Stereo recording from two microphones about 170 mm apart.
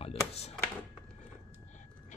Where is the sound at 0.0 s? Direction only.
35° left (ahead or behind).